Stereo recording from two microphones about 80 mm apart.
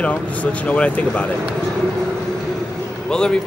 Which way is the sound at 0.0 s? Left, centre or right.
Centre.